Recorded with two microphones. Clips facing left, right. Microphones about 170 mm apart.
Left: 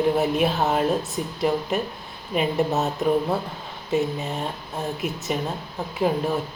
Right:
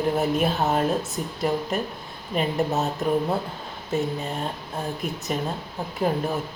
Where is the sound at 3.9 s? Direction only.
Centre (ahead or behind).